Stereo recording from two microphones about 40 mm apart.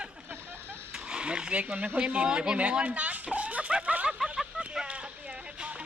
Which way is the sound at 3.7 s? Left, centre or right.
Right.